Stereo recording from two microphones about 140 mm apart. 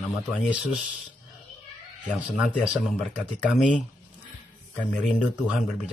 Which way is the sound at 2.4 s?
5° right (ahead or behind).